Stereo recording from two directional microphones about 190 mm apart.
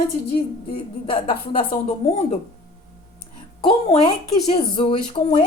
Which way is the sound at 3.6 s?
30° left (ahead or behind).